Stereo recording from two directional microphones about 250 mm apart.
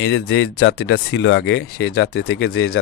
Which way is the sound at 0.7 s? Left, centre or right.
Left.